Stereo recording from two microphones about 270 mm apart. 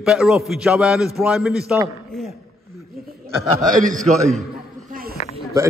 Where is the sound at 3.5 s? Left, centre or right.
Right.